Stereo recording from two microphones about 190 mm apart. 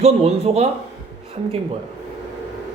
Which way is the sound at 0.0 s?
30° right (ahead or behind).